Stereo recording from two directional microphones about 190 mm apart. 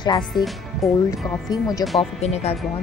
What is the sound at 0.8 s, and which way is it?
Speech, centre (ahead or behind).